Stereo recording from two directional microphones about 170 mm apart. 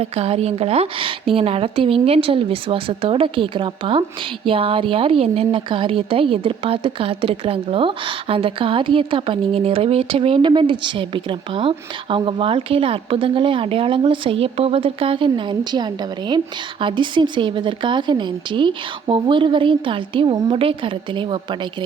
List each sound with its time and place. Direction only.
0.0 s a woman's voice: 35° right (ahead or behind)